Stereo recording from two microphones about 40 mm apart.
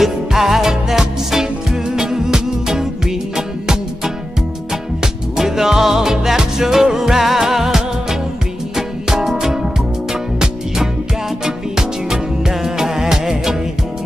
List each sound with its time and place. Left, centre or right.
0.0 s music: centre
11.4 s music: centre